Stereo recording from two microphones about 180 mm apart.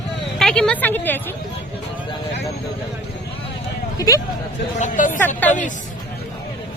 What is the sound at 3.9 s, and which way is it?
A woman's voice, 20° left (ahead or behind).